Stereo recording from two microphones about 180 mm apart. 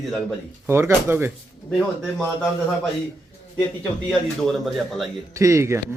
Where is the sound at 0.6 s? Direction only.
15° right (ahead or behind).